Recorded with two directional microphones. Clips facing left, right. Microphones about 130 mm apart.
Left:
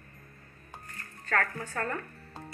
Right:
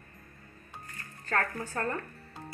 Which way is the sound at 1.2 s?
30° right (ahead or behind).